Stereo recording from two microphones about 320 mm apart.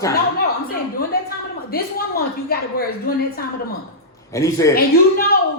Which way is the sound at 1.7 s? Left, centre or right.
Left.